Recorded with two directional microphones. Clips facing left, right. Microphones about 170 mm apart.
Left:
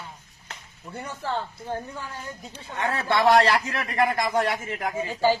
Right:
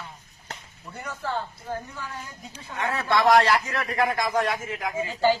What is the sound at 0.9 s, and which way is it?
Speech, 30° left (ahead or behind).